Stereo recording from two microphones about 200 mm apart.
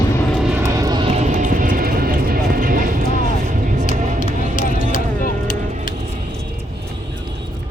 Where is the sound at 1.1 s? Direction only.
35° right (ahead or behind).